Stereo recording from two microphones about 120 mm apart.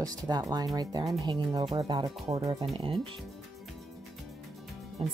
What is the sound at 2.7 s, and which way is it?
Speech, 50° right (ahead or behind).